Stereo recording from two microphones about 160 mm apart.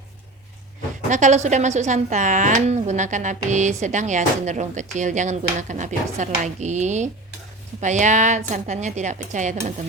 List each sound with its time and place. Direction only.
1.1 s a woman's voice: 50° right (ahead or behind)